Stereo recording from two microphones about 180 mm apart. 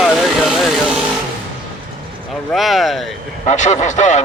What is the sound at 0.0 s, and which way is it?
Vehicle, centre (ahead or behind).